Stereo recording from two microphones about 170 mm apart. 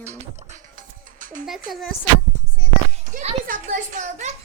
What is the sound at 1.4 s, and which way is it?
Child singing, centre (ahead or behind).